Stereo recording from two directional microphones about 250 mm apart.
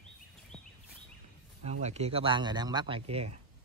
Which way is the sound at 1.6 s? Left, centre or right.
Right.